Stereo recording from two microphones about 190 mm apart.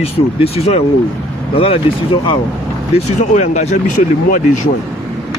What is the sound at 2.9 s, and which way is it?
Speech, 40° left (ahead or behind).